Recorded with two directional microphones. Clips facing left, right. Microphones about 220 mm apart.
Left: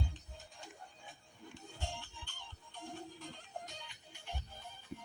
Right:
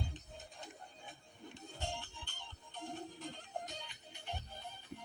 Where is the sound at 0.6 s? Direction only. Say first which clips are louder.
Right 1 dB; 20° right (ahead or behind).